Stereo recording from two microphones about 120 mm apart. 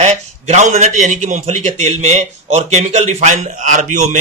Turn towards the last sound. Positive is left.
turn(degrees=-85)